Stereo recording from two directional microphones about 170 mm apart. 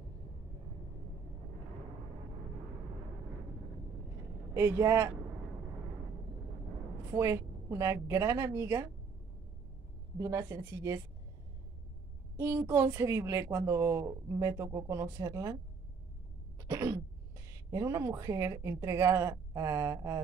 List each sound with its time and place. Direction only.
4.6 s speech: 15° right (ahead or behind)
7.1 s speech: 15° right (ahead or behind)
10.1 s speech: 20° right (ahead or behind)
12.4 s speech: 15° right (ahead or behind)
16.5 s cough: 20° right (ahead or behind)
17.6 s speech: 20° right (ahead or behind)